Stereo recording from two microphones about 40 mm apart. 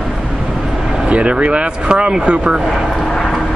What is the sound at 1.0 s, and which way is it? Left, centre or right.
Speech, right.